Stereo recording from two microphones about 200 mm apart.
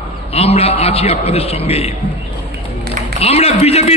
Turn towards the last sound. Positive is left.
turn(degrees=30)  # may be behind; listen again after turning